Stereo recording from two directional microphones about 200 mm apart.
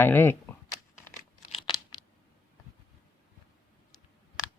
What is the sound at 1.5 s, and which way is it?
Tearing, 25° left (ahead or behind).